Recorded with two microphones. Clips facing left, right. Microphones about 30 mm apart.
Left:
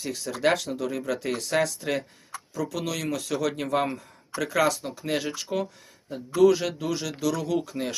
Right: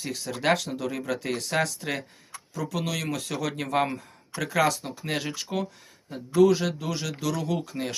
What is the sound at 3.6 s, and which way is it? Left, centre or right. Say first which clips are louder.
Speech: even; centre.